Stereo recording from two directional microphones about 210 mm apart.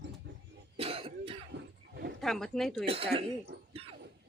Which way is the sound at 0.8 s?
30° right (ahead or behind).